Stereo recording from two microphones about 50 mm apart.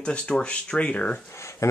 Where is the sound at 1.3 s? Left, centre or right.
Left.